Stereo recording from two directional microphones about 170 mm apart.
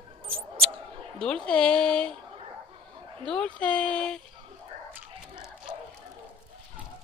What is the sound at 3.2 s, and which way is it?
Speech, 5° left (ahead or behind).